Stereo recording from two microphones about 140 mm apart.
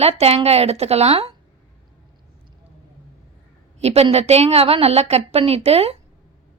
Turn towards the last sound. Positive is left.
turn(degrees=-45)  # may be behind; listen again after turning